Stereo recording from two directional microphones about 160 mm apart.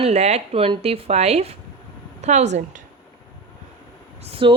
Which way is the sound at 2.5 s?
60° right (ahead or behind).